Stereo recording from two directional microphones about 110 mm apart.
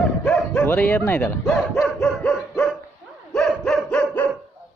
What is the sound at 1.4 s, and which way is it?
Dog, 5° left (ahead or behind).